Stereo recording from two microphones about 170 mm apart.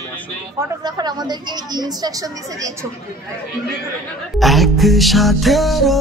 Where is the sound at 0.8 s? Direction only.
25° right (ahead or behind).